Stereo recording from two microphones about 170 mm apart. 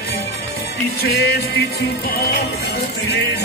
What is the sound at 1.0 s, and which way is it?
Music, 70° left (ahead or behind).